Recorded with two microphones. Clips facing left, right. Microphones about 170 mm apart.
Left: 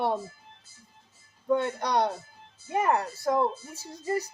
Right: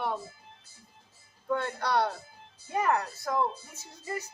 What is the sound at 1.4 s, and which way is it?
Speech, 20° left (ahead or behind).